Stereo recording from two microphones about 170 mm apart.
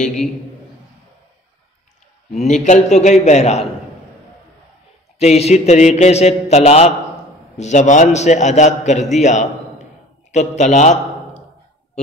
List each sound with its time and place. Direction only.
2.3 s a man's voice: 45° left (ahead or behind)
5.2 s a man's voice: 40° left (ahead or behind)